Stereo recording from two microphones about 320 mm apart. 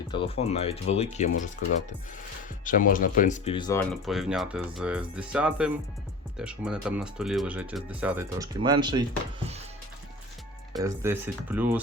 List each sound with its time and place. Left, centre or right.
0.1 s speech: centre
2.6 s speech: left; by 9.0 s centre
10.7 s speech: centre